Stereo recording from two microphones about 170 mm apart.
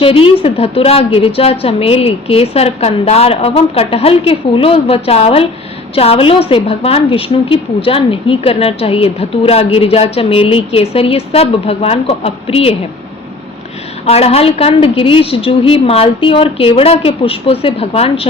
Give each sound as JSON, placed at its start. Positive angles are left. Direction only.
{"t": 0.0, "sound": "a woman's voice", "side_deg": 30}
{"t": 14.0, "sound": "a woman's voice", "side_deg": 35}